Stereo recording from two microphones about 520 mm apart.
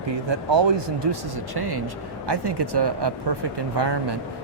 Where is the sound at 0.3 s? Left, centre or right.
Right.